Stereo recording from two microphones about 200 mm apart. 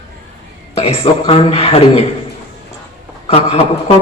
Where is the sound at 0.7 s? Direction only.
30° left (ahead or behind).